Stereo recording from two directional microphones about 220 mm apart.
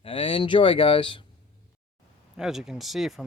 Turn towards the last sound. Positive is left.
turn(degrees=0)  # may be behind; listen again after turning